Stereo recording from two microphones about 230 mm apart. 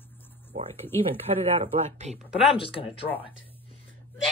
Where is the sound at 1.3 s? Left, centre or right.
Right.